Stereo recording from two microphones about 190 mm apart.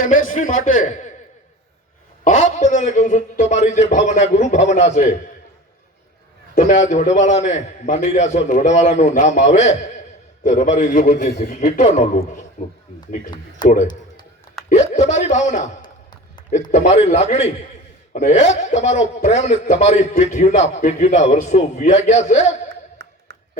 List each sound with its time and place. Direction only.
0.0 s a man's voice: 45° left (ahead or behind)
2.2 s a man's voice: 40° left (ahead or behind)
6.5 s a man's voice: 40° left (ahead or behind)
13.6 s speech: 20° left (ahead or behind)
14.7 s a man's voice: 40° left (ahead or behind)
15.8 s a sound: 20° left (ahead or behind)
16.7 s a man's voice: 35° left (ahead or behind)
23.0 s a sound: 65° right (ahead or behind)